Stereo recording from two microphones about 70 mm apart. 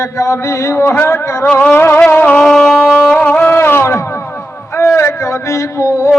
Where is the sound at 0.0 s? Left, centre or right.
Left.